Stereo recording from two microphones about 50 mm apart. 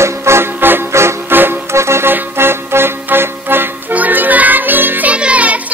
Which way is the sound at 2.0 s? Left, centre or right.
Right.